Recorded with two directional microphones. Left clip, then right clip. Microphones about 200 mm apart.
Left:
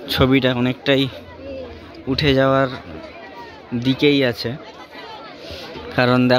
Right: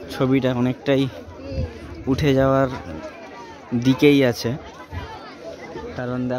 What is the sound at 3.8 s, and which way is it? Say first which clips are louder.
Speech: even; 15° right (ahead or behind).